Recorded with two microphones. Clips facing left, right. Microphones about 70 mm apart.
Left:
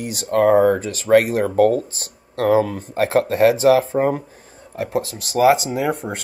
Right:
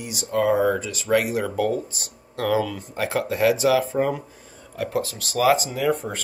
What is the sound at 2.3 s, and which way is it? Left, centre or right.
Speech, left.